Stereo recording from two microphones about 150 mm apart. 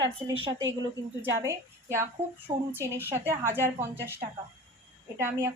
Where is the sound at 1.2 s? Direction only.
15° right (ahead or behind).